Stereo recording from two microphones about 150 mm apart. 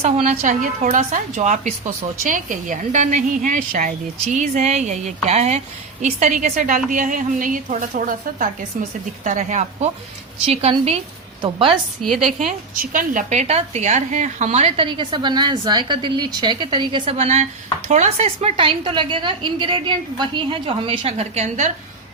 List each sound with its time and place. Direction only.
0.0 s a woman's voice: 45° right (ahead or behind)
0.4 s a woman's voice: 60° right (ahead or behind)
11.4 s a woman's voice: 35° right (ahead or behind)
12.7 s a woman's voice: 70° right (ahead or behind); by 21.7 s 50° right (ahead or behind)